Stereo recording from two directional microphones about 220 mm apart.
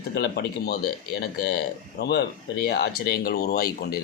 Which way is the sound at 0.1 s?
45° left (ahead or behind).